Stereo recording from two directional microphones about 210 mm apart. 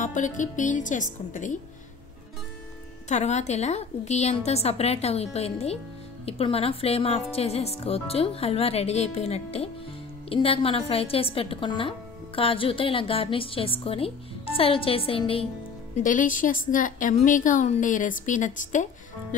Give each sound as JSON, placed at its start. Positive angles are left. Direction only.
{"t": 0.0, "sound": "a woman's voice", "side_deg": 35}
{"t": 3.1, "sound": "a woman's voice", "side_deg": 35}
{"t": 16.0, "sound": "a woman's voice", "side_deg": 40}